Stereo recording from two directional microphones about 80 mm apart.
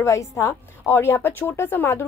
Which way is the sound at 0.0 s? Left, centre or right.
Left.